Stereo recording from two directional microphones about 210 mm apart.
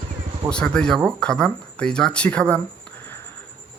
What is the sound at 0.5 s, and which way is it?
A man's voice, 5° left (ahead or behind).